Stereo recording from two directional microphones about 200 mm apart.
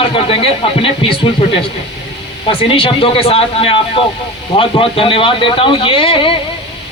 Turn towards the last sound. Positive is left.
turn(degrees=25)  # may be behind; listen again after turning